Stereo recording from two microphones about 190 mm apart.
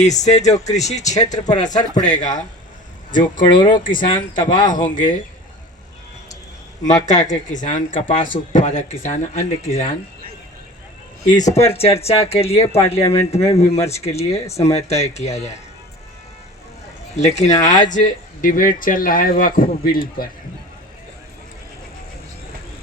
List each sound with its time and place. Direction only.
0.0 s speech: 35° left (ahead or behind)
3.4 s speech: 25° left (ahead or behind)
7.0 s speech: 40° left (ahead or behind)
7.9 s speech: 30° left (ahead or behind)
8.2 s speech: 45° left (ahead or behind)
11.4 s speech: 35° left (ahead or behind)
17.2 s speech: 35° left (ahead or behind)